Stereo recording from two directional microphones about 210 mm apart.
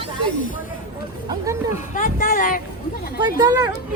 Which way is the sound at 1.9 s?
40° left (ahead or behind).